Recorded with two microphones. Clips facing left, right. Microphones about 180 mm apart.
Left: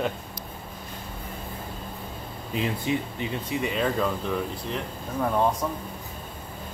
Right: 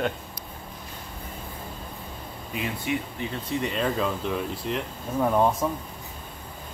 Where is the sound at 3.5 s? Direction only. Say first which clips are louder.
Even; centre (ahead or behind).